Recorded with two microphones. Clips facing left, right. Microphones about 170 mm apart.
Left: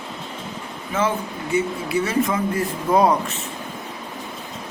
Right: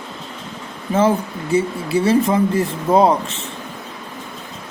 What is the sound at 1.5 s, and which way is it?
Speech, 30° right (ahead or behind).